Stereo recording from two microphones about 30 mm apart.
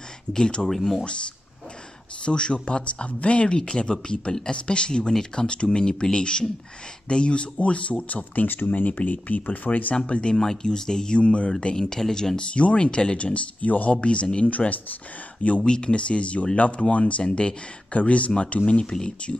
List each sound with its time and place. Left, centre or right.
0.3 s speech: left
0.7 s speech: centre
2.2 s speech: left
9.9 s speech: left
10.3 s speech: centre
11.1 s speech: left
11.7 s speech: centre
12.4 s speech: left
13.7 s speech: left
14.0 s speech: left
14.6 s speech: left
15.9 s speech: left
17.9 s speech: left
18.9 s speech: left